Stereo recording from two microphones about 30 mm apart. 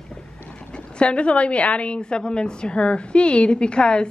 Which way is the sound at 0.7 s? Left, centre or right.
Left.